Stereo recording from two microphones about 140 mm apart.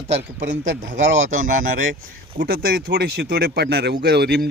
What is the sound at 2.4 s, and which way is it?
Speech, 90° right.